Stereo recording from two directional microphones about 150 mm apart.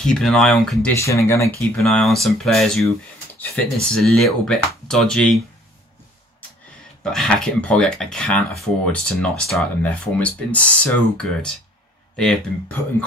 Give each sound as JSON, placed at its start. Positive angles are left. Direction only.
{"t": 0.0, "sound": "speech", "side_deg": 5}
{"t": 0.9, "sound": "speech", "side_deg": 20}
{"t": 1.8, "sound": "speech", "side_deg": 0}
{"t": 7.0, "sound": "speech", "side_deg": 5}